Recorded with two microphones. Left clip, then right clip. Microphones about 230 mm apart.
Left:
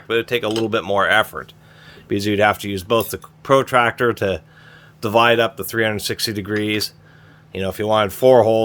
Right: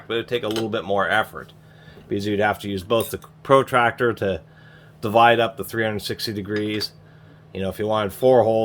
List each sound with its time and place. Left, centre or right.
0.1 s speech: left